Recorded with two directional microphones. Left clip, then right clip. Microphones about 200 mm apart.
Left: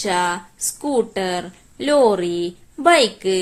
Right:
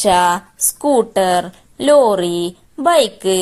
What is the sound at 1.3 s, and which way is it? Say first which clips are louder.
Speech: right 9 dB; 25° right (ahead or behind).